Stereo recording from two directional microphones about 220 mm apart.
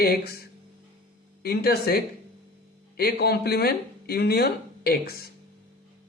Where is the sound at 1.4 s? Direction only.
45° left (ahead or behind).